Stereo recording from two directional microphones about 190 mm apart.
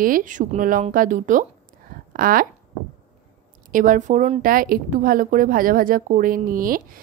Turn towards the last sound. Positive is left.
turn(degrees=-45)  # may be behind; listen again after turning